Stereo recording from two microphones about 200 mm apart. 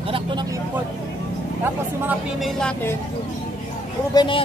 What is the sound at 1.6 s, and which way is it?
Speech, 10° right (ahead or behind).